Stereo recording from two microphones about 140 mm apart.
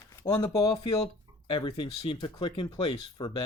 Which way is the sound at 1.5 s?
35° left (ahead or behind).